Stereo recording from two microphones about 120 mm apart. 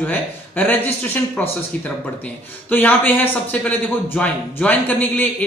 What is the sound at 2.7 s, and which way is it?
Speech, 15° left (ahead or behind).